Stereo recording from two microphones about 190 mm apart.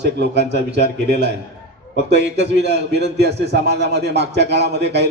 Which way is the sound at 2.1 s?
65° right (ahead or behind).